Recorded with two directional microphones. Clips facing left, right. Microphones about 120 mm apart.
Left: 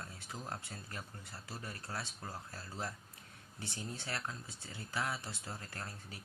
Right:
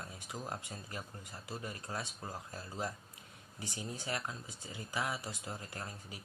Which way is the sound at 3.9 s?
15° right (ahead or behind).